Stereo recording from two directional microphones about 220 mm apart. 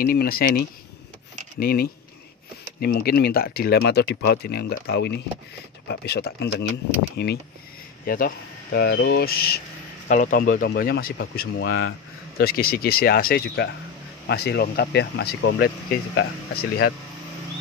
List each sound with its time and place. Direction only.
0.0 s speech: 40° left (ahead or behind)